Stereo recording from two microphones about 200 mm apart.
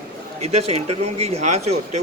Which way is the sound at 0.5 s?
30° right (ahead or behind).